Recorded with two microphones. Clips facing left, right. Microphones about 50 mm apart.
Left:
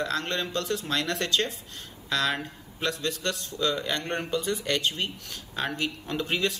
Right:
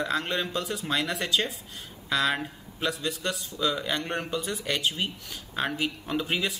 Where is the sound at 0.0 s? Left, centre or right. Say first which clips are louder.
Right 1 dB; centre.